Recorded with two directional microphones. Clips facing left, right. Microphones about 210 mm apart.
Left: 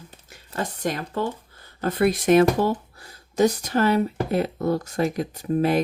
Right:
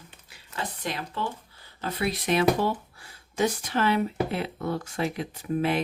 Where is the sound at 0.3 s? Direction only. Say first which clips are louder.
Left 6 dB; 45° left (ahead or behind).